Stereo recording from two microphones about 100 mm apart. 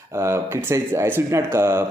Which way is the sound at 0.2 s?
25° right (ahead or behind).